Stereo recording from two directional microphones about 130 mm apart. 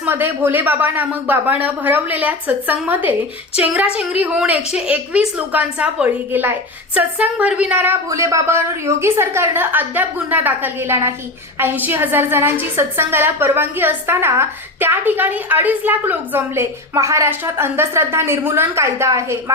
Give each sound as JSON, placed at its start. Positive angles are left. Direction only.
{"t": 0.0, "sound": "a woman's voice", "side_deg": -15}
{"t": 8.1, "sound": "a woman's voice", "side_deg": -25}